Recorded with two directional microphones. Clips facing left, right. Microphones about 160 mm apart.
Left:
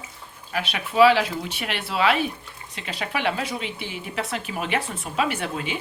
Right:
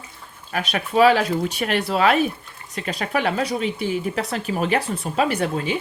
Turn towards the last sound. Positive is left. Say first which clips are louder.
# right 5 dB
turn(degrees=-40)  # may be behind; listen again after turning